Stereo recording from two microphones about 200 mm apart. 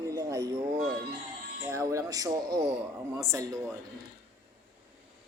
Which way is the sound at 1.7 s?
15° right (ahead or behind).